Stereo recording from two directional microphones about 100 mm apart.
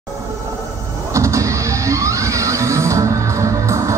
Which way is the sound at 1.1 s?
30° right (ahead or behind).